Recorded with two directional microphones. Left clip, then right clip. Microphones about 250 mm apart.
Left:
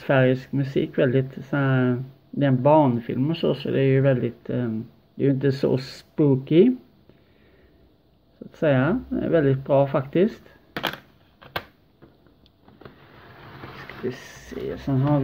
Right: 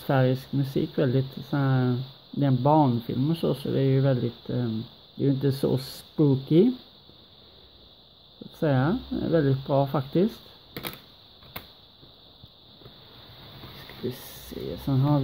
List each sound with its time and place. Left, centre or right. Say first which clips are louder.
0.0 s speech: left 5 dB; centre
8.5 s speech: left 5 dB; centre
14.9 s speech: left 3 dB; centre